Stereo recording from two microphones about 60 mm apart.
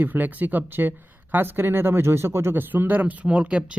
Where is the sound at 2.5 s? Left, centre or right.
Right.